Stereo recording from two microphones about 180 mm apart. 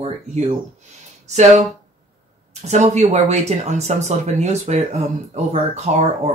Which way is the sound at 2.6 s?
40° right (ahead or behind).